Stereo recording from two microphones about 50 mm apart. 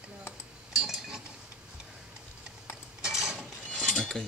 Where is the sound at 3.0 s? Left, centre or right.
Centre.